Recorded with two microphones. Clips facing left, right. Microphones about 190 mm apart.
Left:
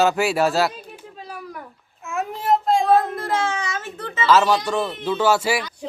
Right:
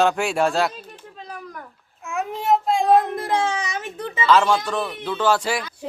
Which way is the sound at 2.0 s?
Centre (ahead or behind).